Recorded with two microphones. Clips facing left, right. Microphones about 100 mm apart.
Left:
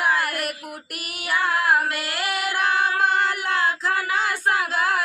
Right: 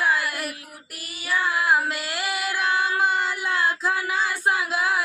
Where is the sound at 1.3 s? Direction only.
65° left (ahead or behind).